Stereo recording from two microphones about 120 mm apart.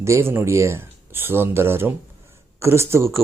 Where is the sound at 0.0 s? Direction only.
20° right (ahead or behind).